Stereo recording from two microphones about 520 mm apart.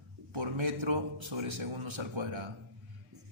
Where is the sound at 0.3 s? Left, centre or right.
Right.